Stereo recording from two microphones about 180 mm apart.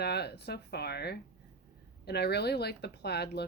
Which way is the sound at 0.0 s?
65° left (ahead or behind).